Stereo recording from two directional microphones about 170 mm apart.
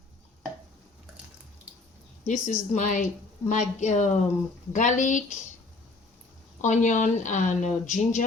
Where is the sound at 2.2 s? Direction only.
45° left (ahead or behind).